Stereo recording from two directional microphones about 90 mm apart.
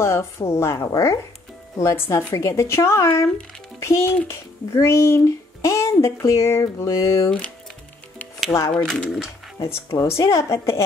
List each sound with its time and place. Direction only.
0.0 s speech: 30° left (ahead or behind)
8.5 s speech: 25° left (ahead or behind)
8.8 s speech: centre (ahead or behind)
9.6 s speech: 35° left (ahead or behind)